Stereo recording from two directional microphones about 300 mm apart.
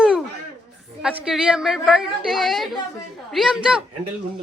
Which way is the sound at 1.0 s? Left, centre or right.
Centre.